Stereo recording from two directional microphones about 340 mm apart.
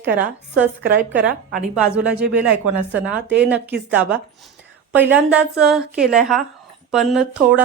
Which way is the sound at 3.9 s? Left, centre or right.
Centre.